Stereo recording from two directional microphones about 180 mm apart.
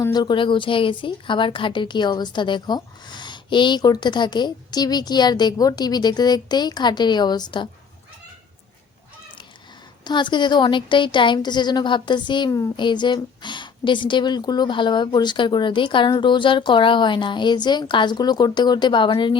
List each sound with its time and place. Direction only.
0.0 s a woman's voice: 25° left (ahead or behind)
10.0 s a woman's voice: 25° left (ahead or behind)